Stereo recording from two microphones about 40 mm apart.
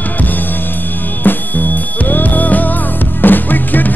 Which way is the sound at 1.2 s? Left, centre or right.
Left.